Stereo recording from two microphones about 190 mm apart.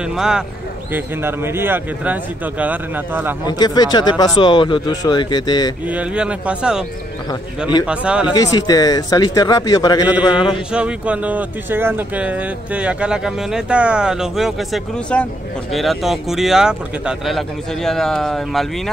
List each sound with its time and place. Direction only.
0.0 s a man's voice: 5° right (ahead or behind)
3.4 s a man's voice: 20° left (ahead or behind)
5.9 s speech: 5° right (ahead or behind)
7.8 s speech: 5° right (ahead or behind)
8.3 s a man's voice: 20° left (ahead or behind)
10.7 s speech: 5° right (ahead or behind)